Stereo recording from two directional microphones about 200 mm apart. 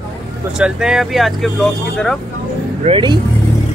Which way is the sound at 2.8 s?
25° right (ahead or behind).